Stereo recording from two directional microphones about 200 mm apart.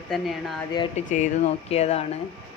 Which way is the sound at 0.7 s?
25° left (ahead or behind).